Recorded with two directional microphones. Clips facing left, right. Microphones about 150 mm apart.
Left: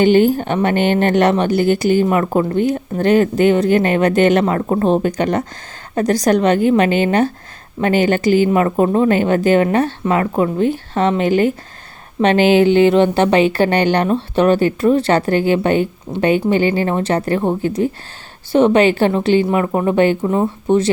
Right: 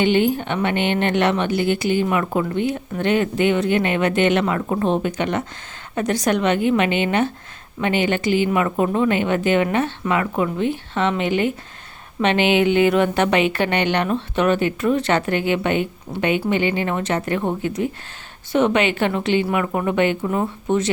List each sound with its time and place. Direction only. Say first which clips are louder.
0.0 s speech: left 6 dB; 40° left (ahead or behind)